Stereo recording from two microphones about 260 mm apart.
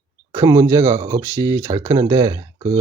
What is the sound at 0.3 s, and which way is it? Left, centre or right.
Speech, centre.